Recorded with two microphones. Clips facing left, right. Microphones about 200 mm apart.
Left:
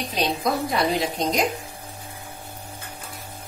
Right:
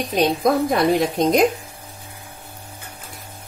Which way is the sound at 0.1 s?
50° right (ahead or behind).